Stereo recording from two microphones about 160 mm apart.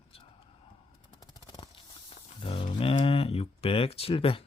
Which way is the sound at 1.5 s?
35° left (ahead or behind).